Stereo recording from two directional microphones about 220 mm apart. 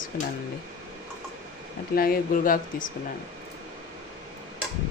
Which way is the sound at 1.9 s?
40° left (ahead or behind).